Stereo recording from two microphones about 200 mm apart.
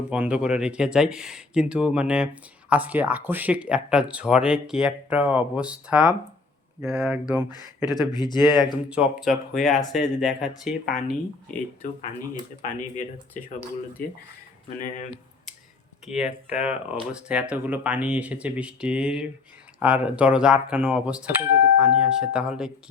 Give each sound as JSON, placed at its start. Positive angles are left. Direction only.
{"t": 0.1, "sound": "speech", "side_deg": -5}
{"t": 7.9, "sound": "speech", "side_deg": 20}
{"t": 8.5, "sound": "speech", "side_deg": -5}
{"t": 11.8, "sound": "speech", "side_deg": 40}
{"t": 14.8, "sound": "speech", "side_deg": 40}
{"t": 16.0, "sound": "speech", "side_deg": -5}